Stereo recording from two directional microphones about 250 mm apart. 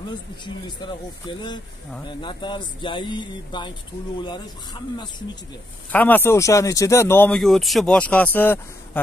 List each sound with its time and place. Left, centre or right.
0.7 s speech: centre
5.9 s speech: centre